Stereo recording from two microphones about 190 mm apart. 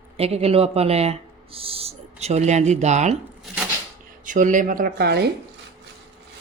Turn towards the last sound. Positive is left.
turn(degrees=-60)  # may be behind; listen again after turning